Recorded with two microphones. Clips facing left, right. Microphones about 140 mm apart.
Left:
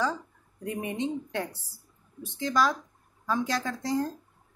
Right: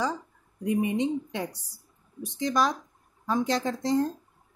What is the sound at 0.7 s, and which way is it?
A woman's voice, 15° right (ahead or behind).